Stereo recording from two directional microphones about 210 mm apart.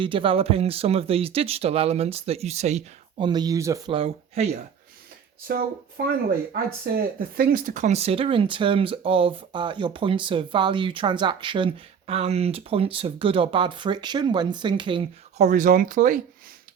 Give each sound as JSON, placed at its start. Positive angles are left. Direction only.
{"t": 0.0, "sound": "speech", "side_deg": -25}
{"t": 3.9, "sound": "speech", "side_deg": -30}
{"t": 5.5, "sound": "speech", "side_deg": -45}
{"t": 15.4, "sound": "speech", "side_deg": -40}